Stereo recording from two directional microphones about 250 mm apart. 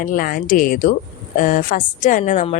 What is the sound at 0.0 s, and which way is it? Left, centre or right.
A woman's voice, left.